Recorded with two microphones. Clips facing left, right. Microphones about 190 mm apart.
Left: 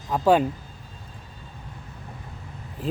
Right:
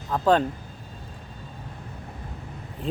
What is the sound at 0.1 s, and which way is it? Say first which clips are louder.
Speech: left 2 dB; 10° left (ahead or behind).